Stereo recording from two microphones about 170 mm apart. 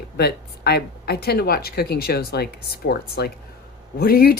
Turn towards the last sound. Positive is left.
turn(degrees=65)  # may be behind; listen again after turning